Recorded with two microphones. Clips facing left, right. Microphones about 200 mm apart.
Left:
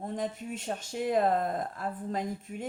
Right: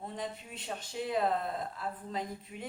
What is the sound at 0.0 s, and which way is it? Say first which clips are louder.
Speech: left 6 dB; 45° left (ahead or behind).